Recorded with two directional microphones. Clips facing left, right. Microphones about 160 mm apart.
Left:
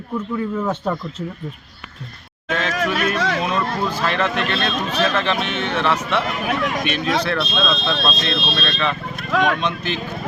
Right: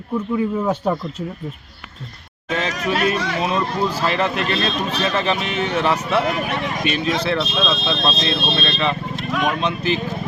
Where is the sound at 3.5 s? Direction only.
30° right (ahead or behind).